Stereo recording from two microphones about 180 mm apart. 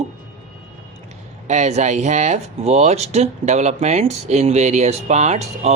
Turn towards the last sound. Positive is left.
turn(degrees=-40)  # may be behind; listen again after turning